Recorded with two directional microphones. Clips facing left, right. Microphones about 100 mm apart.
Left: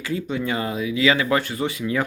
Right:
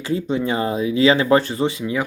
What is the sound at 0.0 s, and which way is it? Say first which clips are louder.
Speech: right 4 dB; 30° right (ahead or behind).